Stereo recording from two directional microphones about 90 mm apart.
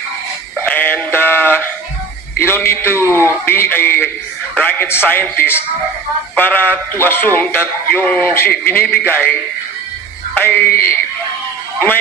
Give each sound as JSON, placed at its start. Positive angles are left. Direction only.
{"t": 0.6, "sound": "synthetic singing", "side_deg": 20}
{"t": 2.3, "sound": "a man's voice", "side_deg": 25}